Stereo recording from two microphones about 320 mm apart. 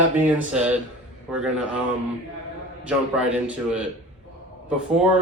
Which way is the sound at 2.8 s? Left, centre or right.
Centre.